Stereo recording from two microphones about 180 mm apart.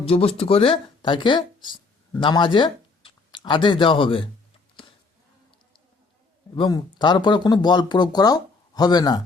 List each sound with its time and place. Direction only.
0.1 s speech: 30° left (ahead or behind)
6.6 s speech: 25° left (ahead or behind)